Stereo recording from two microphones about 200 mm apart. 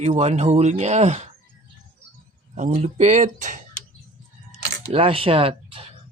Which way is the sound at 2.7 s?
35° right (ahead or behind).